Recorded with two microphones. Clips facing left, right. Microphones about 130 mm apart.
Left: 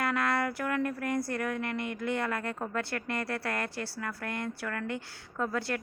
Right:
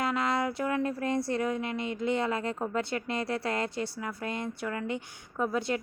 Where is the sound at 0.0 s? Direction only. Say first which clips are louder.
Right 1 dB; 20° right (ahead or behind).